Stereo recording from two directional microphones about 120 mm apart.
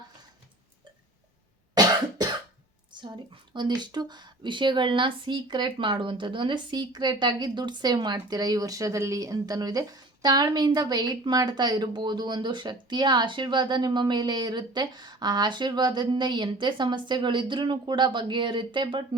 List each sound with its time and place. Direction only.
1.7 s cough: 35° right (ahead or behind)
2.9 s a woman's voice: 40° right (ahead or behind)